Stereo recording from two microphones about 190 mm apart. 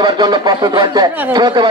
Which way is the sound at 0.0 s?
20° right (ahead or behind).